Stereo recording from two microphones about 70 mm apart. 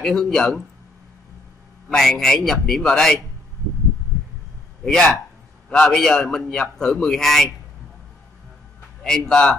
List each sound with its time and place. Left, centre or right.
0.0 s a man's voice: centre
1.9 s a man's voice: centre
4.8 s a man's voice: centre
9.0 s a man's voice: centre